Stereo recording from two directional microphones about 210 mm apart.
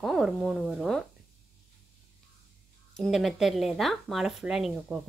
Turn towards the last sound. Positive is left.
turn(degrees=0)  # may be behind; listen again after turning